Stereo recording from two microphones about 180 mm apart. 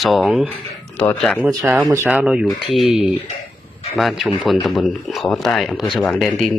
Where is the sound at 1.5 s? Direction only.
20° right (ahead or behind).